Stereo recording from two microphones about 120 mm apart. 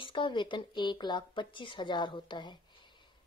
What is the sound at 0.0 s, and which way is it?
Speech, 45° left (ahead or behind).